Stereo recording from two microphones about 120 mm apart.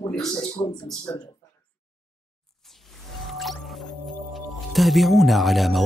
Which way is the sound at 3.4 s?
Centre (ahead or behind).